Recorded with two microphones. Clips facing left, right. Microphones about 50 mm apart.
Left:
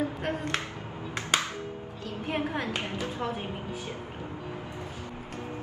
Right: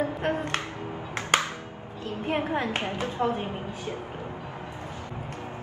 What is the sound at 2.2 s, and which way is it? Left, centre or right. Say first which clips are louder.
A woman's voice: right 3 dB; right.